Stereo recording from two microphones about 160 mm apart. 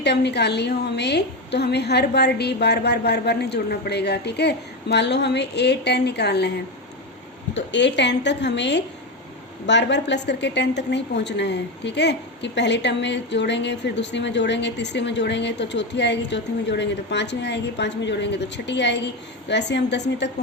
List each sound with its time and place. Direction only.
0.0 s a woman's voice: 90° left
7.7 s a woman's voice: 90° left